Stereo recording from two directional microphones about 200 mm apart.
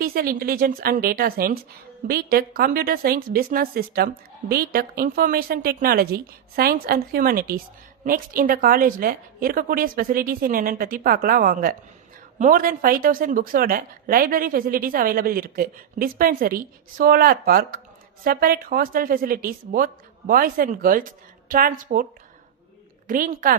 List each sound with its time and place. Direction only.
0.0 s a woman's voice: 45° right (ahead or behind)
23.0 s a woman's voice: 45° right (ahead or behind)